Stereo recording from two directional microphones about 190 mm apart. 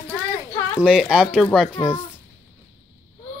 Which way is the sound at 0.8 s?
5° right (ahead or behind).